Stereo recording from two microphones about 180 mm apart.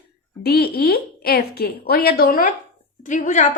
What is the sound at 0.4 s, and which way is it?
A woman's voice, 60° left (ahead or behind).